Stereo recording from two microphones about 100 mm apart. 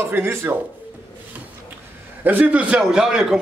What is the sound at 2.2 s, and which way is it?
A man's voice, 15° right (ahead or behind).